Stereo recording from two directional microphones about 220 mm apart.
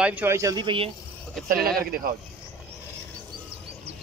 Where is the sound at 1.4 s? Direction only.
40° right (ahead or behind).